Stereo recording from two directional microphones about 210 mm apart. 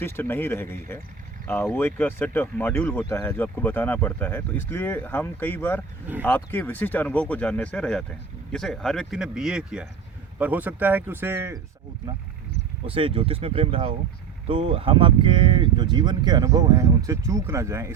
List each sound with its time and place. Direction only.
0.0 s speech: 10° left (ahead or behind); by 11.6 s 10° right (ahead or behind)
12.8 s speech: 25° right (ahead or behind)